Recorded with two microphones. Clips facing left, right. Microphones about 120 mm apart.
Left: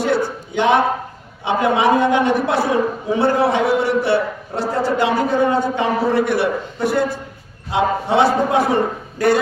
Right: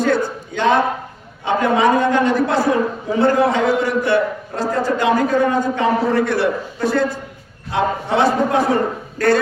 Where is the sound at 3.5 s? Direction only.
25° left (ahead or behind).